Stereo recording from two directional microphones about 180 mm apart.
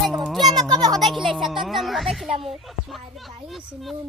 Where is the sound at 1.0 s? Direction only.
Centre (ahead or behind).